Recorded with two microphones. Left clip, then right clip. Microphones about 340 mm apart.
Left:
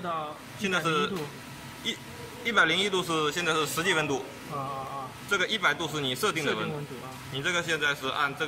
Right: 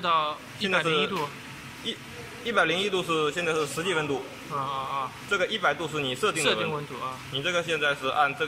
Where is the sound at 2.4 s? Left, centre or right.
Centre.